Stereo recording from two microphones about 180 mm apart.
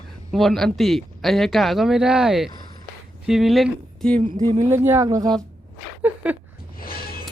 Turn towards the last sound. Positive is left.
turn(degrees=55)  # may be behind; listen again after turning